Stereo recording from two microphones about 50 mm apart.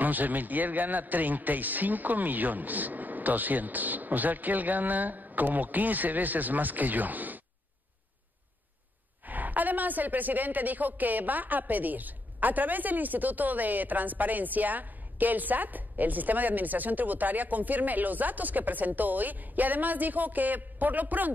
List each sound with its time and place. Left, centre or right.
0.0 s a woman's voice: right
9.2 s a woman's voice: right